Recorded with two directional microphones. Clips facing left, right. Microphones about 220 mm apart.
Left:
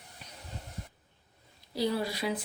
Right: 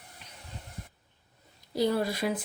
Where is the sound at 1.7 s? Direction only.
50° right (ahead or behind).